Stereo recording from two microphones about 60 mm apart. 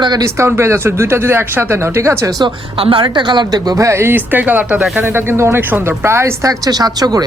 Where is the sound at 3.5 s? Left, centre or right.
Right.